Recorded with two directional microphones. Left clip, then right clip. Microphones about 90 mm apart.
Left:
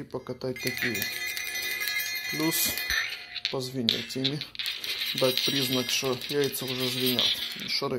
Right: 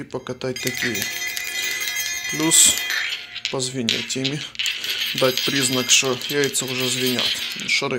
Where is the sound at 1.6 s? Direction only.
25° left (ahead or behind).